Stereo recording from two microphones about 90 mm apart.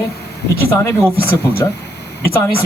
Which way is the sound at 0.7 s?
30° left (ahead or behind).